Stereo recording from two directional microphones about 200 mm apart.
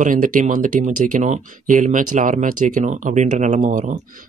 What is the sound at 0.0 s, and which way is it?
Speech, 40° right (ahead or behind).